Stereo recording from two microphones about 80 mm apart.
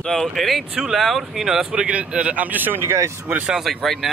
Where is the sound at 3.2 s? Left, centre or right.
Centre.